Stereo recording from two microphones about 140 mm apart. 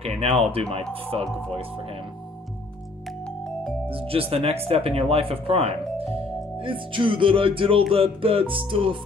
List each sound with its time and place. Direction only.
0.5 s speech: 45° right (ahead or behind)
1.1 s music: 40° right (ahead or behind)
4.1 s speech: 45° right (ahead or behind)
6.6 s music: 35° right (ahead or behind)